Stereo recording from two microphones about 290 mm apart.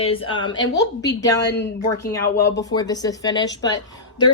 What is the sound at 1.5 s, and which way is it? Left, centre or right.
Speech, left.